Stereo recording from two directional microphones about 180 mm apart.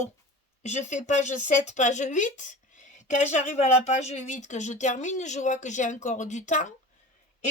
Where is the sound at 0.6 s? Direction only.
40° left (ahead or behind).